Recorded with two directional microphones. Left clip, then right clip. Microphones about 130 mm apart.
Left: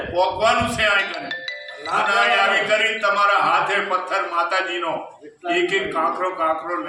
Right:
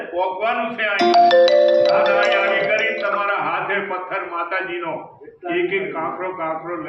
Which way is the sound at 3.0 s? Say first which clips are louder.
Left 3 dB; 25° left (ahead or behind).